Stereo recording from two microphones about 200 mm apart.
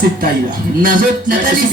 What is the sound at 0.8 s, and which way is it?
Speech, 45° right (ahead or behind).